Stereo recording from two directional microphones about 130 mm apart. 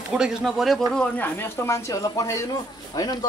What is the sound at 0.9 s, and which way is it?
A man's voice, 10° left (ahead or behind).